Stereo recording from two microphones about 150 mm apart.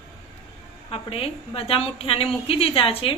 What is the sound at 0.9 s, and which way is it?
A woman's voice, 40° left (ahead or behind).